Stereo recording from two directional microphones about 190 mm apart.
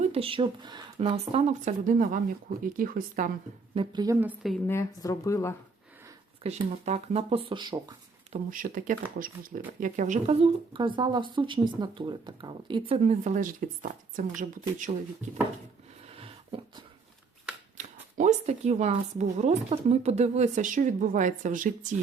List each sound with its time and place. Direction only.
0.0 s speech: 30° right (ahead or behind); by 3.3 s 50° right (ahead or behind)
3.8 s a woman's voice: 20° right (ahead or behind)
4.6 s speech: 15° left (ahead or behind)
6.4 s speech: 35° right (ahead or behind)
8.4 s speech: 45° right (ahead or behind)
16.1 s a sound: 30° right (ahead or behind)
17.7 s speech: 40° right (ahead or behind)